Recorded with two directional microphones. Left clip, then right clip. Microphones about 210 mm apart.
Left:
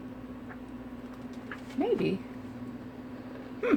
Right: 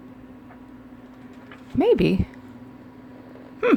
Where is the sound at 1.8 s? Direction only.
45° right (ahead or behind).